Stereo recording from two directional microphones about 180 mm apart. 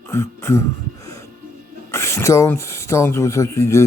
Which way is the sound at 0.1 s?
15° left (ahead or behind).